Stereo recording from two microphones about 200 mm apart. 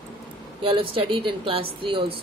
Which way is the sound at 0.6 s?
25° right (ahead or behind).